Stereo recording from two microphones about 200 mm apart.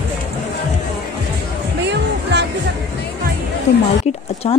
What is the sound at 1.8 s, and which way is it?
Music, 60° right (ahead or behind).